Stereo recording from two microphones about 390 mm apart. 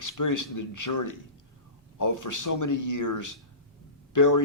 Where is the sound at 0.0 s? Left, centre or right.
Left.